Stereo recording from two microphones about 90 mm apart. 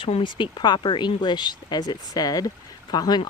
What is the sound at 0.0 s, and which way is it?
Speech, 65° left (ahead or behind).